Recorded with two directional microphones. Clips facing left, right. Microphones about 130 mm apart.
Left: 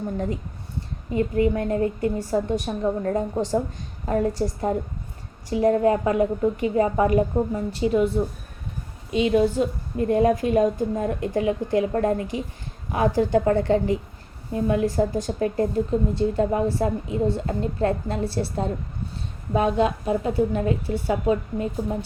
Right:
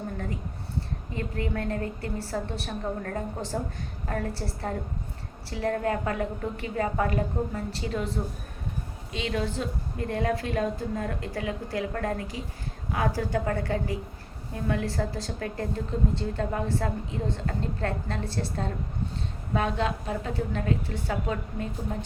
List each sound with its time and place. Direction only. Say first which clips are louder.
1.1 s a woman's voice: left 10 dB; 15° left (ahead or behind)